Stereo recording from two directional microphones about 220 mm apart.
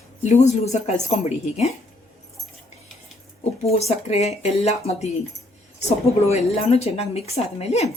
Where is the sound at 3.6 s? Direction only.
30° left (ahead or behind).